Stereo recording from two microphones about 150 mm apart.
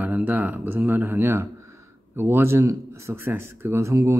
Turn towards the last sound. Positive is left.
turn(degrees=-20)  # may be behind; listen again after turning